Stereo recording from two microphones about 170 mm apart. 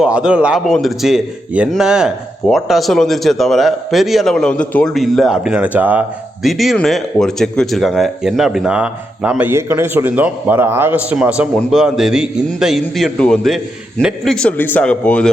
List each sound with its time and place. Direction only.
0.0 s a man's voice: 5° right (ahead or behind)